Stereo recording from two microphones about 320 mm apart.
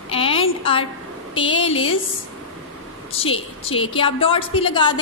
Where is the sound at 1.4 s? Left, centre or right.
Centre.